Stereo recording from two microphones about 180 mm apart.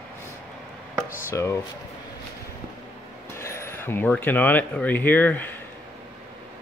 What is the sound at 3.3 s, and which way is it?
Speech, 15° left (ahead or behind).